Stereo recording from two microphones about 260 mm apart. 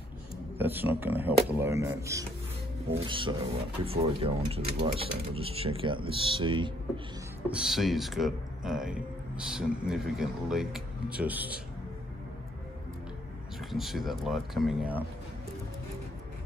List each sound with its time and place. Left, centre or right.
0.6 s speech: centre
7.4 s speech: centre
13.7 s speech: centre